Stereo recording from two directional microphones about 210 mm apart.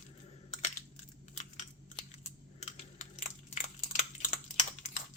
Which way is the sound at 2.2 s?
35° left (ahead or behind).